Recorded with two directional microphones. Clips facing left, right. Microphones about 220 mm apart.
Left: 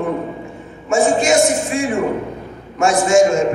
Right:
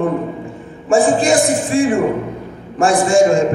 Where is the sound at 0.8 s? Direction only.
30° right (ahead or behind).